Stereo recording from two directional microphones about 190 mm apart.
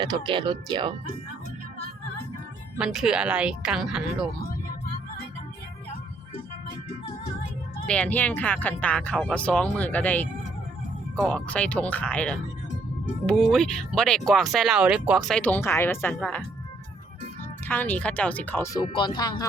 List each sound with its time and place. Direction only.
0.0 s speech: 25° right (ahead or behind)
2.7 s speech: 5° right (ahead or behind)
7.9 s speech: 5° left (ahead or behind)
15.4 s speech: 10° left (ahead or behind)
17.7 s speech: 10° left (ahead or behind)